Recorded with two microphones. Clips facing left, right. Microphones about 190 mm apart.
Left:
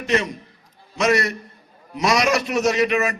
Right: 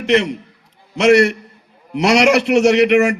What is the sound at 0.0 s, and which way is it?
A man's voice, 70° right (ahead or behind).